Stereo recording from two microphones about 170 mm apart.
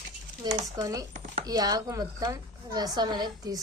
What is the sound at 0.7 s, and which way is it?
Speech, 20° right (ahead or behind).